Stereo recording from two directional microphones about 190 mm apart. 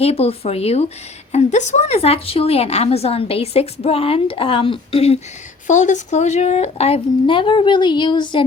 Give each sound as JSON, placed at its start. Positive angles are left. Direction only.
{"t": 0.0, "sound": "a woman's voice", "side_deg": 30}